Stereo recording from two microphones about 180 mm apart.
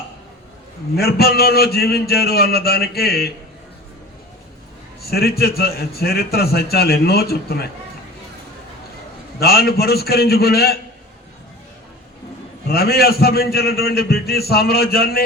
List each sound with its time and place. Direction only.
0.9 s a man's voice: 60° left (ahead or behind)
5.0 s a man's voice: 60° left (ahead or behind)
9.4 s a man's voice: 60° left (ahead or behind)
12.6 s a man's voice: 60° left (ahead or behind)